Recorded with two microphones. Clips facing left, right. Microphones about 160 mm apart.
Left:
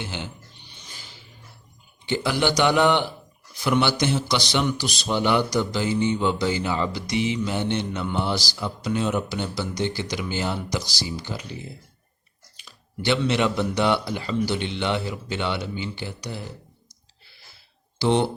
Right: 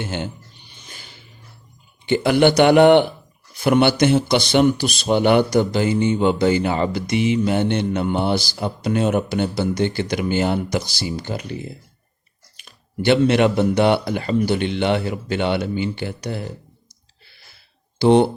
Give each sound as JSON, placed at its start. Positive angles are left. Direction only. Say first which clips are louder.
{"t": 0.0, "sound": "speech", "louder": "right 6 dB", "side_deg": -50}
{"t": 0.9, "sound": "a sound", "louder": "right 3 dB", "side_deg": -55}
{"t": 2.0, "sound": "speech", "louder": "right 8 dB", "side_deg": -55}
{"t": 18.0, "sound": "speech", "louder": "right 7 dB", "side_deg": -55}